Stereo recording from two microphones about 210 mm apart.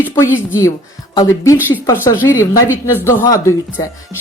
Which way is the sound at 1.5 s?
10° right (ahead or behind).